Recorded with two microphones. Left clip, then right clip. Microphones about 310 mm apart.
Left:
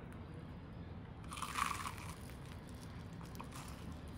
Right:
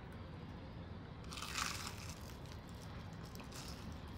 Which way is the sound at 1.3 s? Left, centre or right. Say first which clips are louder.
Left 3 dB; centre.